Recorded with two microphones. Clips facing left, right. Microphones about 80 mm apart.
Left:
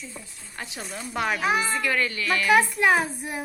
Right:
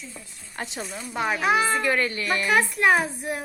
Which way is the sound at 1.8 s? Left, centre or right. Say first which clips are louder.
Right 2 dB; right.